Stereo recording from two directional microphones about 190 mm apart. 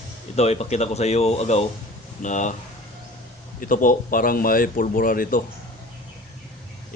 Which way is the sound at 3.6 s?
45° left (ahead or behind).